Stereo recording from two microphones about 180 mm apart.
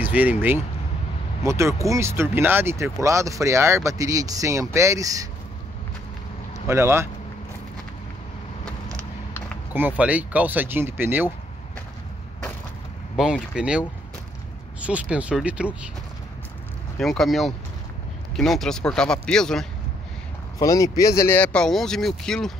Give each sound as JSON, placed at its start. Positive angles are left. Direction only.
{"t": 0.0, "sound": "speech", "side_deg": -10}
{"t": 6.7, "sound": "speech", "side_deg": -15}
{"t": 9.8, "sound": "speech", "side_deg": -10}
{"t": 13.1, "sound": "a man's voice", "side_deg": -5}
{"t": 17.0, "sound": "a man's voice", "side_deg": 0}
{"t": 20.5, "sound": "speech", "side_deg": 20}